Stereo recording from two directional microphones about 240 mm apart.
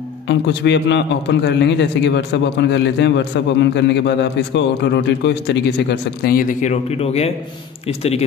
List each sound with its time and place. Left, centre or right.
0.3 s a man's voice: left